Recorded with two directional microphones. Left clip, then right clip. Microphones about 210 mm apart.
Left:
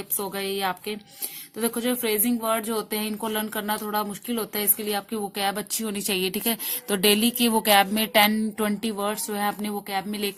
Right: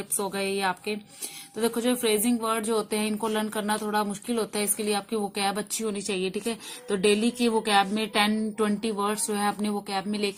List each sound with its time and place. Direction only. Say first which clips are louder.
0.2 s speech: even; 20° left (ahead or behind)